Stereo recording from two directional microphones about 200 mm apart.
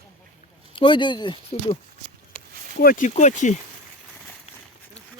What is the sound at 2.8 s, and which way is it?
Speech, 45° left (ahead or behind).